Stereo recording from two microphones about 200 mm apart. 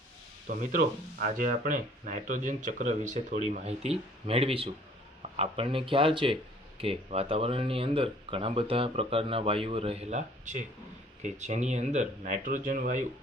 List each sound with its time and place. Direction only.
0.5 s speech: 40° right (ahead or behind)